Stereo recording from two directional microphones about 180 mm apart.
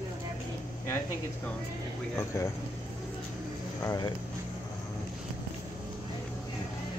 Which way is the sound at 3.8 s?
20° left (ahead or behind).